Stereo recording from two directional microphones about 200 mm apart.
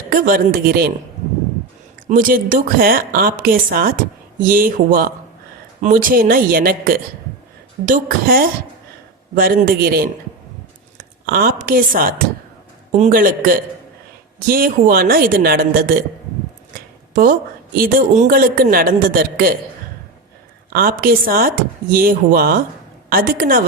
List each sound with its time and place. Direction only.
0.1 s a woman's voice: 45° right (ahead or behind)
2.0 s a woman's voice: 45° right (ahead or behind)
17.7 s a woman's voice: 40° right (ahead or behind)
20.7 s a woman's voice: 45° right (ahead or behind)